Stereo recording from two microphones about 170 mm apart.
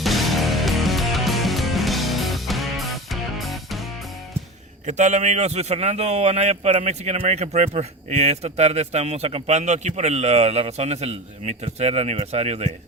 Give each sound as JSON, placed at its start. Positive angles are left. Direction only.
{"t": 0.0, "sound": "music", "side_deg": 0}
{"t": 4.9, "sound": "a man's voice", "side_deg": -45}